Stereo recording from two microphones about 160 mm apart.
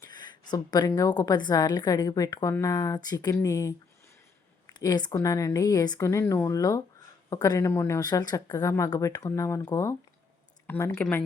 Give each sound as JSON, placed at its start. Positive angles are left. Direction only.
{"t": 0.0, "sound": "a woman's voice", "side_deg": 25}